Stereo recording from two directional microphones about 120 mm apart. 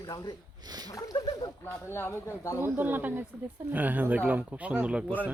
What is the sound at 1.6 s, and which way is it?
Speech, 15° left (ahead or behind).